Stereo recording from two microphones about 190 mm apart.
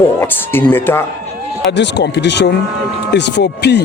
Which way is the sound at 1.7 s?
65° left (ahead or behind).